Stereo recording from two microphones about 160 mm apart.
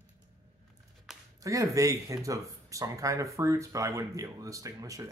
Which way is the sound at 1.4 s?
20° right (ahead or behind).